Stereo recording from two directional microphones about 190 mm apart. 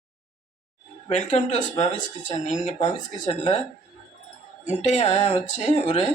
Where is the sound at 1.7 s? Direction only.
35° left (ahead or behind).